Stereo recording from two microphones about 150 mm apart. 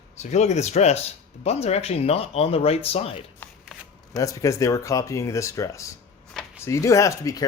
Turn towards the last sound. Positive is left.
turn(degrees=20)  # may be behind; listen again after turning